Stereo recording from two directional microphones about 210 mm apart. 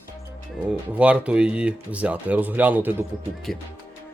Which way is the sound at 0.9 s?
5° right (ahead or behind).